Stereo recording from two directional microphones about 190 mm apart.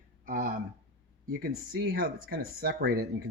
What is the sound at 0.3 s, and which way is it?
Speech, 45° right (ahead or behind).